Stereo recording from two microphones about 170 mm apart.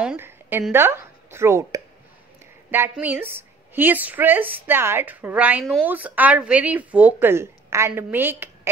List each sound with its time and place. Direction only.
0.0 s a woman's voice: 10° right (ahead or behind)